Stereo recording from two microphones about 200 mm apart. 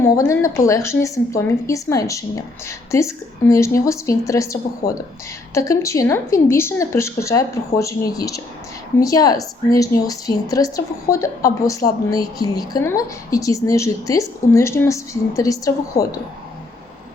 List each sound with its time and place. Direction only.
0.0 s a woman's voice: 15° left (ahead or behind)
4.8 s speech: 45° left (ahead or behind)
5.5 s a woman's voice: 15° left (ahead or behind)